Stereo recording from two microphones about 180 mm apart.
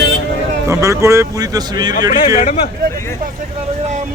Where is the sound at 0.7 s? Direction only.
15° right (ahead or behind).